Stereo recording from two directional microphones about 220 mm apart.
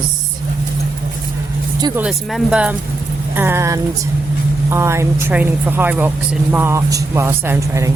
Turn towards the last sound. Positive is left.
turn(degrees=-15)  # may be behind; listen again after turning